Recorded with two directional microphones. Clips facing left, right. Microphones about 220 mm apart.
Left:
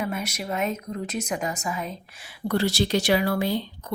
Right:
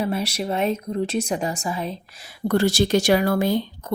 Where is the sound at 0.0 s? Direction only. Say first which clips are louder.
Right 5 dB; 30° right (ahead or behind).